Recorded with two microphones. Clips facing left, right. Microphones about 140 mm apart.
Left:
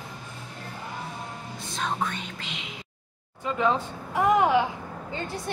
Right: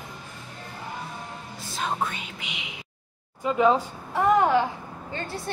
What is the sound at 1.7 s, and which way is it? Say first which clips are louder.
Speech: right 1 dB; 5° right (ahead or behind).